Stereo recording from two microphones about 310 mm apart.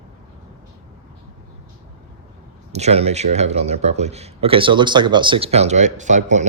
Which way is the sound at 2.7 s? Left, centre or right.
Right.